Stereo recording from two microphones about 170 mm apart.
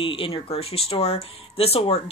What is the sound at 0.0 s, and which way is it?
Speech, 30° left (ahead or behind).